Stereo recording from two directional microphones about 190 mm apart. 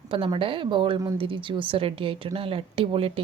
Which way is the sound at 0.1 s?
25° right (ahead or behind).